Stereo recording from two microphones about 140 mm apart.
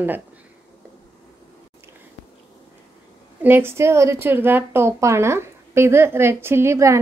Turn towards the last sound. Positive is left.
turn(degrees=-20)  # may be behind; listen again after turning